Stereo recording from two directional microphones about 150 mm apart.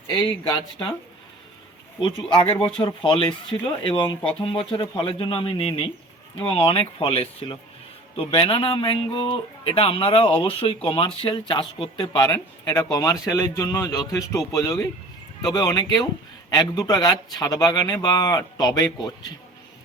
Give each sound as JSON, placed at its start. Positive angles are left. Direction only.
{"t": 2.0, "sound": "a man's voice", "side_deg": 35}